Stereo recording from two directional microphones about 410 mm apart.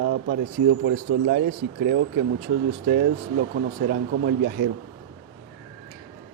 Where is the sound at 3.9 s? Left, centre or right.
Right.